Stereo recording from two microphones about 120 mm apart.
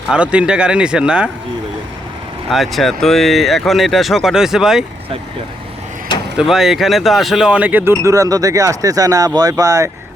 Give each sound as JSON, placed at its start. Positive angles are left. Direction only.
{"t": 0.1, "sound": "speech", "side_deg": -10}
{"t": 2.5, "sound": "speech", "side_deg": 0}
{"t": 6.3, "sound": "speech", "side_deg": -5}